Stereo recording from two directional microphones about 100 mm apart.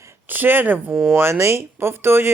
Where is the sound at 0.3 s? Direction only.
20° right (ahead or behind).